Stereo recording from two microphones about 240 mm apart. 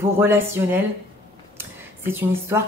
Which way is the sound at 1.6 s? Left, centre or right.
Centre.